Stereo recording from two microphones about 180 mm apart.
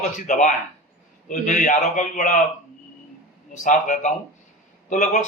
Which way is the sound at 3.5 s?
45° left (ahead or behind).